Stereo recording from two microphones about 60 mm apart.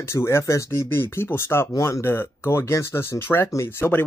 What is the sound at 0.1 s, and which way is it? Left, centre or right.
Speech, left.